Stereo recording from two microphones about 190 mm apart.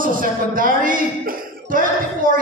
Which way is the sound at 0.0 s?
45° right (ahead or behind).